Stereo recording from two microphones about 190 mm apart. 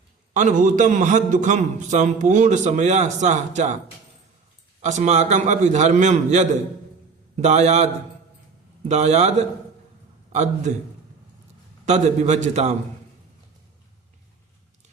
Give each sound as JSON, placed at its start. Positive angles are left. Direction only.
{"t": 0.3, "sound": "a man's voice", "side_deg": -40}
{"t": 4.8, "sound": "a man's voice", "side_deg": -40}
{"t": 8.9, "sound": "a man's voice", "side_deg": -35}
{"t": 10.3, "sound": "a man's voice", "side_deg": -35}
{"t": 11.9, "sound": "a man's voice", "side_deg": -35}